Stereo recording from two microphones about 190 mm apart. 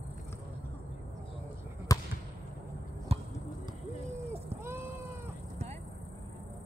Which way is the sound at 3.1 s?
30° right (ahead or behind).